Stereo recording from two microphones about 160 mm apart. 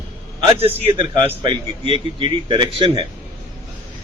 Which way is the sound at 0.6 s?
40° right (ahead or behind).